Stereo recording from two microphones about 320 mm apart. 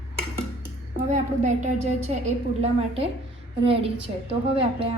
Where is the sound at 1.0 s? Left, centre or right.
Right.